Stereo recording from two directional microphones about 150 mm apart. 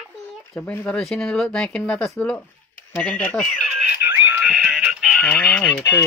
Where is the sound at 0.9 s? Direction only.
5° left (ahead or behind).